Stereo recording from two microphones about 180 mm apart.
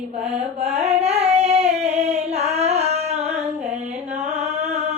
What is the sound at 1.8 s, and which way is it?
Singing, 35° right (ahead or behind).